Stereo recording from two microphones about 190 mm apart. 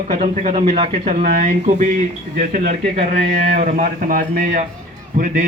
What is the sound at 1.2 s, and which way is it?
A man's voice, 45° right (ahead or behind).